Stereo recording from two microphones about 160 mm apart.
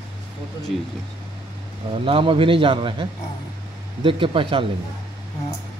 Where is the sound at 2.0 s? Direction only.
35° right (ahead or behind).